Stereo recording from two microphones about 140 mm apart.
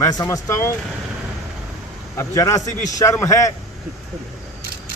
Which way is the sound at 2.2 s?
20° left (ahead or behind).